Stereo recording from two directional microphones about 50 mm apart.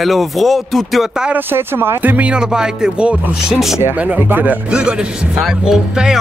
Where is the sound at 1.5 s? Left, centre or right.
Right.